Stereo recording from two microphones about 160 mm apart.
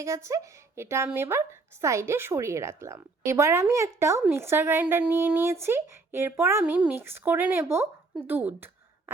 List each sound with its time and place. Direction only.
0.0 s a woman's voice: 20° right (ahead or behind)